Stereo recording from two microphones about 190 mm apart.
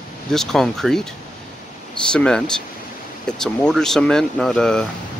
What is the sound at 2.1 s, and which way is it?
Speech, 5° left (ahead or behind).